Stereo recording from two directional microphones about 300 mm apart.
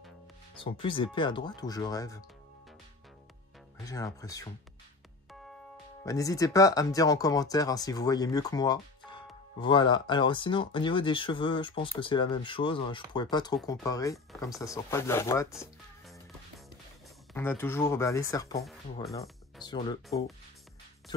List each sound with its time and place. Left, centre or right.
0.6 s speech: centre
3.8 s speech: centre
6.0 s speech: centre
14.1 s speech: centre
14.6 s music: centre
17.3 s speech: centre
19.6 s speech: centre